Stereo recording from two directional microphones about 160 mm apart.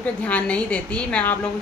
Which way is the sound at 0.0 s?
10° left (ahead or behind).